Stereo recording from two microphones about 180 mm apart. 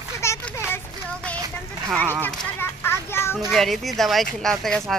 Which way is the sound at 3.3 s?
Centre (ahead or behind).